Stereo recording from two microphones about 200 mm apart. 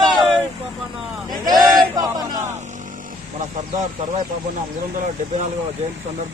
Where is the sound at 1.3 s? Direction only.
20° right (ahead or behind).